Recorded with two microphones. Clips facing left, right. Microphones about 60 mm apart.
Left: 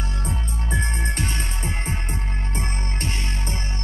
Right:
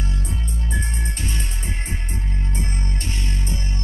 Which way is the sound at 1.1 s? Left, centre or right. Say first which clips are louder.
Left 2 dB; left.